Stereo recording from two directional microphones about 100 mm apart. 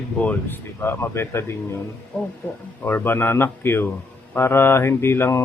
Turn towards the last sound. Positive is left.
turn(degrees=25)  # may be behind; listen again after turning